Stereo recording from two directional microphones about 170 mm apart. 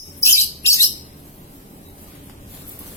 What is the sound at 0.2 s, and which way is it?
Bird, 15° left (ahead or behind).